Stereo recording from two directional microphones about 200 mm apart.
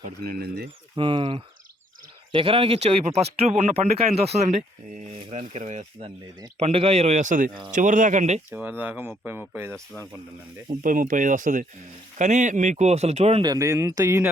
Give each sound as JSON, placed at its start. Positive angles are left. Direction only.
{"t": 0.2, "sound": "speech", "side_deg": -50}
{"t": 0.9, "sound": "speech", "side_deg": -25}
{"t": 3.4, "sound": "speech", "side_deg": -5}
{"t": 4.1, "sound": "speech", "side_deg": -30}
{"t": 8.4, "sound": "speech", "side_deg": -10}
{"t": 9.7, "sound": "speech", "side_deg": 5}
{"t": 10.7, "sound": "speech", "side_deg": -40}